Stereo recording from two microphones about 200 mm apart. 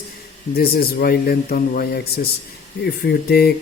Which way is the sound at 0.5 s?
50° left (ahead or behind).